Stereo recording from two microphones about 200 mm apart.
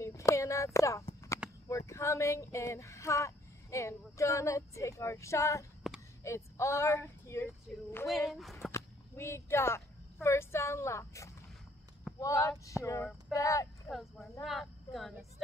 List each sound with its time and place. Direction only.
0.0 s a sound: 15° left (ahead or behind)
0.7 s speech: 15° left (ahead or behind)
13.8 s speech: centre (ahead or behind)